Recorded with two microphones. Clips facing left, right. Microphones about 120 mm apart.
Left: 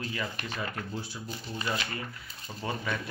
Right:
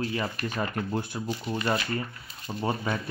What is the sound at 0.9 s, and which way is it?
Speech, 55° right (ahead or behind).